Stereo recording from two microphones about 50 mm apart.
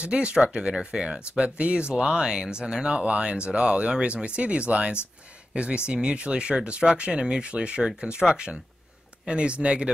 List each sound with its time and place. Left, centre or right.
0.0 s speech: centre